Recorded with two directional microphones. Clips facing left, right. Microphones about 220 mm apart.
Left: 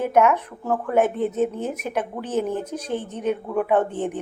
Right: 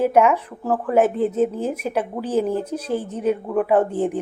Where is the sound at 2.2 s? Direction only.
35° right (ahead or behind).